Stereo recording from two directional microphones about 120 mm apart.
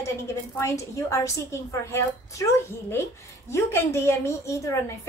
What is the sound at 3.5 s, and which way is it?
A woman's voice, 20° left (ahead or behind).